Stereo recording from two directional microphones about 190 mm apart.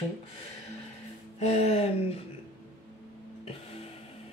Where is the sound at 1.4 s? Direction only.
35° left (ahead or behind).